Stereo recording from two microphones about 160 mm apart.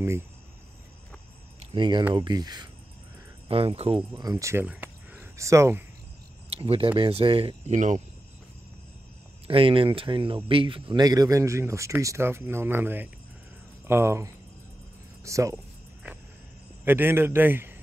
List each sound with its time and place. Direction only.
1.6 s speech: 30° right (ahead or behind)
4.1 s speech: 20° right (ahead or behind)
6.5 s speech: 35° right (ahead or behind)
7.7 s speech: 50° right (ahead or behind)
9.5 s a man's voice: 35° right (ahead or behind)
16.8 s a man's voice: 15° right (ahead or behind)